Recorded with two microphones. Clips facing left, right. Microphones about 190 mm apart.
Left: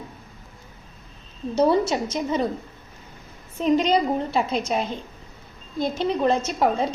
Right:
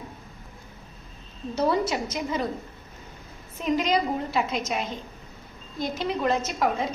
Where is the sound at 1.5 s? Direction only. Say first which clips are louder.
Left 5 dB; 25° left (ahead or behind).